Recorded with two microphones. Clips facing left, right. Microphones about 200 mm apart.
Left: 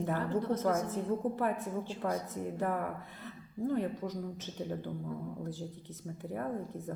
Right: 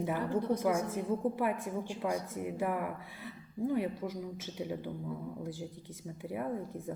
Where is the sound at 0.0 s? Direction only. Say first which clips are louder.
Even; 10° right (ahead or behind).